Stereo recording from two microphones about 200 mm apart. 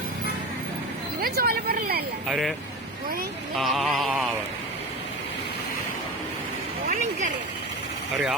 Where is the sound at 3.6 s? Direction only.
Centre (ahead or behind).